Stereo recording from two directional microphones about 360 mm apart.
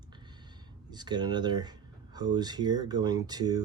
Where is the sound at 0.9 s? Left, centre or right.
Centre.